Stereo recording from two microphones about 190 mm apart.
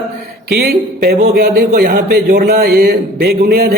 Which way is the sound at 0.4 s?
55° right (ahead or behind).